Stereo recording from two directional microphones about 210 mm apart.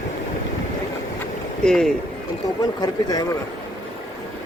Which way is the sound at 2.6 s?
20° left (ahead or behind).